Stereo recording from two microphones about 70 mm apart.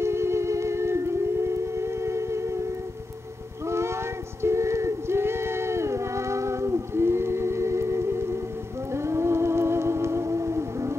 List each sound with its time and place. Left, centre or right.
0.0 s music: right
3.6 s music: right